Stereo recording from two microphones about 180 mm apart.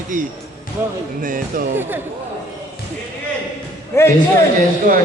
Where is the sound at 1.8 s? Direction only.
10° right (ahead or behind).